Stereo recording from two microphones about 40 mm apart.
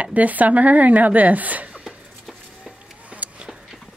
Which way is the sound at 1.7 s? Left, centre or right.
Centre.